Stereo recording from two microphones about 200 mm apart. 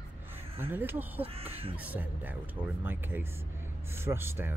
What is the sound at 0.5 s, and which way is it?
Speech, 10° right (ahead or behind).